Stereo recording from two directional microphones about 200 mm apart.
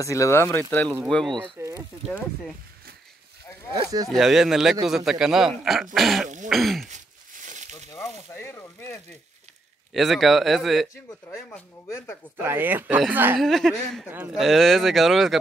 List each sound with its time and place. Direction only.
0.0 s speech: 15° left (ahead or behind)
1.6 s speech: 15° right (ahead or behind)
3.7 s speech: 20° right (ahead or behind)
4.1 s speech: centre (ahead or behind)
6.2 s throat clearing: 40° right (ahead or behind)
6.5 s speech: centre (ahead or behind)
6.9 s a sound: 40° right (ahead or behind)
7.9 s speech: 10° left (ahead or behind)
9.9 s speech: centre (ahead or behind)
12.4 s speech: 10° right (ahead or behind)
13.4 s speech: centre (ahead or behind)
14.1 s speech: 10° right (ahead or behind)
14.4 s speech: centre (ahead or behind)